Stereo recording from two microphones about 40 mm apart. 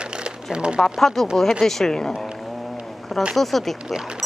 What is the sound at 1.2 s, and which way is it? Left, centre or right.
Speech, centre.